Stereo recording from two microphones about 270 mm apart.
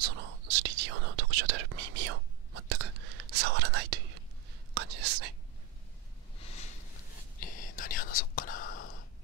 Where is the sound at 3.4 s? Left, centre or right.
Right.